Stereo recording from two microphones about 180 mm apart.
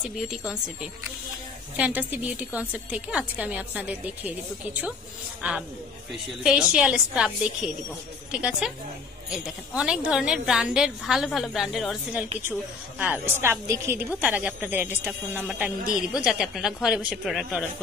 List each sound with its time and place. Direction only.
0.3 s a woman's voice: 5° right (ahead or behind)
1.8 s a woman's voice: 10° right (ahead or behind)
5.4 s a woman's voice: 5° right (ahead or behind)